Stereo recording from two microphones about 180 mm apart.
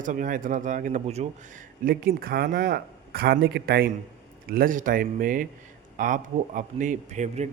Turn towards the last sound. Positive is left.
turn(degrees=-40)  # may be behind; listen again after turning